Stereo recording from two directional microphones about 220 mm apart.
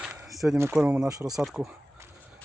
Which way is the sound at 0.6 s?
5° right (ahead or behind).